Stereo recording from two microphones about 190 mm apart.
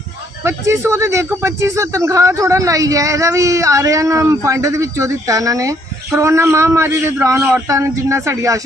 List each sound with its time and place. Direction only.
0.4 s speech: 15° right (ahead or behind)